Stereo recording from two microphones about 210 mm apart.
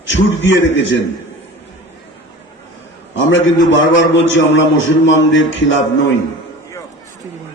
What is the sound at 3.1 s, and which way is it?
A man's voice, 65° left (ahead or behind).